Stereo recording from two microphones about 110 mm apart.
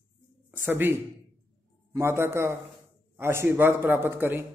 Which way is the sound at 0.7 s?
20° right (ahead or behind).